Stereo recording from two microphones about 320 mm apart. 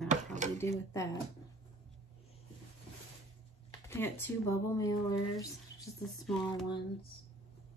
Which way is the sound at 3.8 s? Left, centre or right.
Centre.